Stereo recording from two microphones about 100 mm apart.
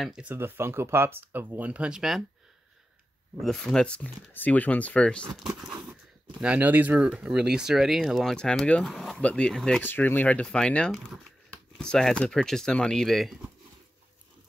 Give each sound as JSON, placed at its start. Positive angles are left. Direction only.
{"t": 0.0, "sound": "speech", "side_deg": -5}
{"t": 0.3, "sound": "speech", "side_deg": -20}
{"t": 3.3, "sound": "speech", "side_deg": 5}
{"t": 5.4, "sound": "speech", "side_deg": -5}
{"t": 6.4, "sound": "speech", "side_deg": -15}
{"t": 7.1, "sound": "speech", "side_deg": -5}
{"t": 9.8, "sound": "speech", "side_deg": 20}